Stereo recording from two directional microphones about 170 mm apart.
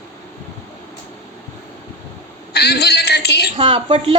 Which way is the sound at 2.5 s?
70° left (ahead or behind).